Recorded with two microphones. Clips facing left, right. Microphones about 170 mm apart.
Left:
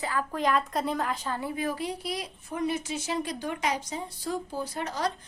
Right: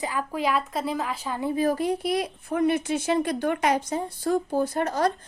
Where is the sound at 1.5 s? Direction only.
45° right (ahead or behind).